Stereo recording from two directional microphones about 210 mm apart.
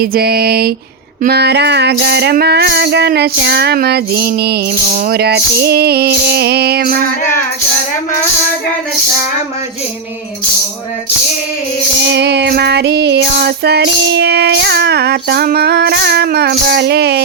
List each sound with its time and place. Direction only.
0.0 s music: 45° right (ahead or behind)
12.0 s music: 55° right (ahead or behind)